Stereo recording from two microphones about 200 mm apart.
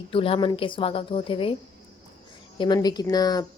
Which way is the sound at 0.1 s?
25° left (ahead or behind).